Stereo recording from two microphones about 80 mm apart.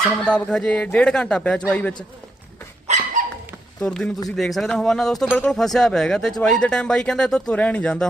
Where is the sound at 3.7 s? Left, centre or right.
Centre.